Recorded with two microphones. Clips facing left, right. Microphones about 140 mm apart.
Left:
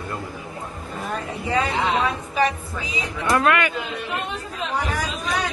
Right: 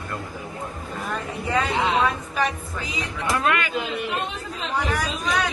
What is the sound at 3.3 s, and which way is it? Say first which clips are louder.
Speech: left 4 dB; 70° left (ahead or behind).